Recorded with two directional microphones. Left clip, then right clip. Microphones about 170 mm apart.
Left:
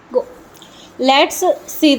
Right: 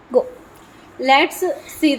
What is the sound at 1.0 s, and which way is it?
Speech, 50° left (ahead or behind).